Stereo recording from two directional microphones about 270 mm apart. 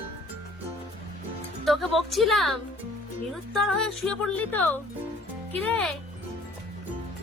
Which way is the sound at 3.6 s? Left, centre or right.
Centre.